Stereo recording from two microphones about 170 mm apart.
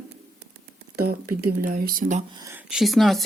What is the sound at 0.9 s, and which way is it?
Speech, 60° right (ahead or behind).